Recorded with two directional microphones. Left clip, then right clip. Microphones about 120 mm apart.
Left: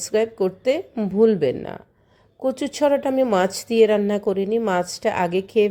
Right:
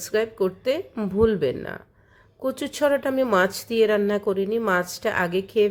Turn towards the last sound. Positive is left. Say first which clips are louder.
# left 2 dB
turn(degrees=25)  # may be behind; listen again after turning